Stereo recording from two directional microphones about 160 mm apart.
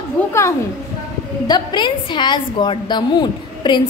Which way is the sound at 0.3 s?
15° left (ahead or behind).